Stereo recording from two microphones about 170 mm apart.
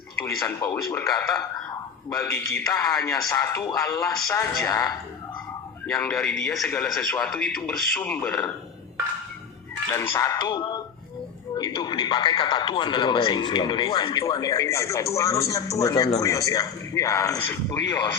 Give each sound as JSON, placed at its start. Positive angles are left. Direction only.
{"t": 0.3, "sound": "speech", "side_deg": 20}
{"t": 5.8, "sound": "speech", "side_deg": 10}
{"t": 9.9, "sound": "speech", "side_deg": 15}